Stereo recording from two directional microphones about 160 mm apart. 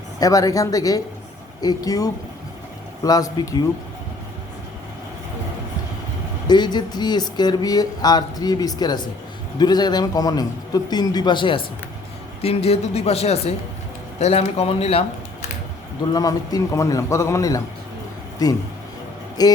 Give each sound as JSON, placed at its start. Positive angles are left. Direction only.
{"t": 0.2, "sound": "speech", "side_deg": 20}
{"t": 6.5, "sound": "speech", "side_deg": 25}
{"t": 16.1, "sound": "speech", "side_deg": 25}
{"t": 19.4, "sound": "speech", "side_deg": 25}